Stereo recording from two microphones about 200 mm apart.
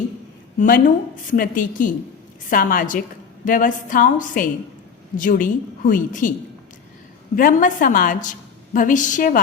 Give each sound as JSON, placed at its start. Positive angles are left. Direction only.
{"t": 0.6, "sound": "a woman's voice", "side_deg": 40}
{"t": 7.3, "sound": "a woman's voice", "side_deg": 45}